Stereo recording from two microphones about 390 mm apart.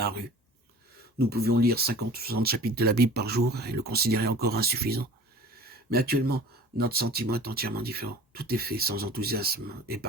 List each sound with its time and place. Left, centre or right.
1.3 s speech: right